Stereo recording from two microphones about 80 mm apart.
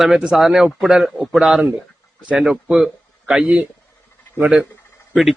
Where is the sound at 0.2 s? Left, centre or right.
Centre.